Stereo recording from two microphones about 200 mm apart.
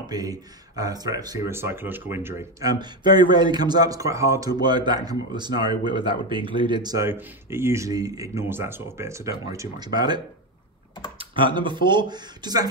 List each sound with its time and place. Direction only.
0.0 s speech: 20° right (ahead or behind)